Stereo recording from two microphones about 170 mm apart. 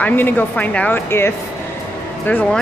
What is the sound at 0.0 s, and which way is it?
Speech, 10° left (ahead or behind).